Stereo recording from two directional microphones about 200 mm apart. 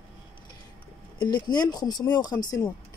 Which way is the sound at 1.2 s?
20° left (ahead or behind).